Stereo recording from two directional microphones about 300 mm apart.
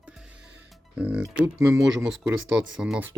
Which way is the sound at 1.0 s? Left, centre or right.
Centre.